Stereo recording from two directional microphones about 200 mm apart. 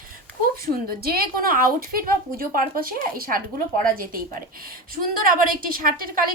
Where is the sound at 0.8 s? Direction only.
50° right (ahead or behind).